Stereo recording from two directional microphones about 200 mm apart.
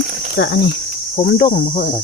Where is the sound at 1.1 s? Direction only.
50° left (ahead or behind).